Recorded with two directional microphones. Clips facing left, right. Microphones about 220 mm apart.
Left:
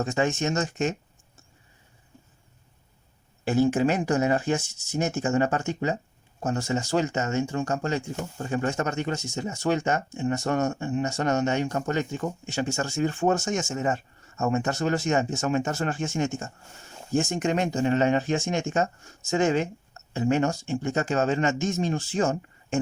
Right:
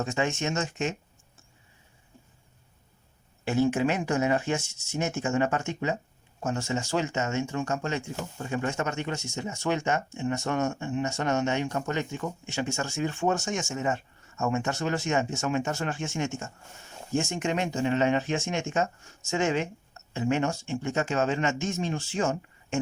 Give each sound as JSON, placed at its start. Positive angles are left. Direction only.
{"t": 0.0, "sound": "speech", "side_deg": 35}
{"t": 3.4, "sound": "speech", "side_deg": 35}